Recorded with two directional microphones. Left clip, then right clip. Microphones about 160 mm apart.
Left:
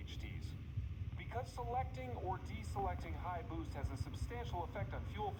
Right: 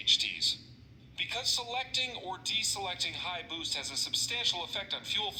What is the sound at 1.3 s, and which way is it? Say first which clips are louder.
A man's voice: right 8 dB; 20° right (ahead or behind).